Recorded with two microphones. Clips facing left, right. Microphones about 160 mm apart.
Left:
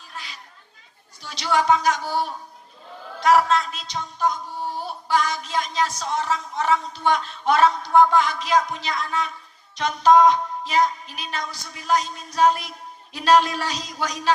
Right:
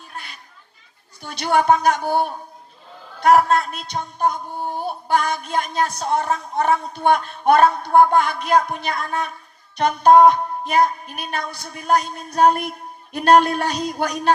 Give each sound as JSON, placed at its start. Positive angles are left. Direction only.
{"t": 0.1, "sound": "children playing", "side_deg": -55}
{"t": 1.2, "sound": "speech", "side_deg": -55}